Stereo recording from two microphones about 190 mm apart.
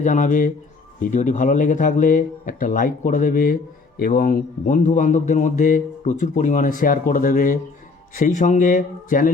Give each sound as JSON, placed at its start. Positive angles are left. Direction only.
{"t": 0.0, "sound": "speech", "side_deg": 40}